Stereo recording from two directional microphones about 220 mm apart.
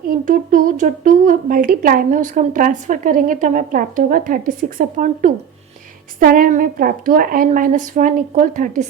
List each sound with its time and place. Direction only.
0.1 s speech: 40° right (ahead or behind)